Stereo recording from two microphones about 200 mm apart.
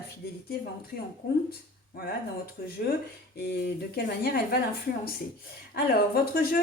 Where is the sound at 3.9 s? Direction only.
50° left (ahead or behind).